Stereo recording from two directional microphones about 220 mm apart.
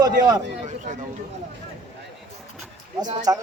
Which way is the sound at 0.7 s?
35° right (ahead or behind).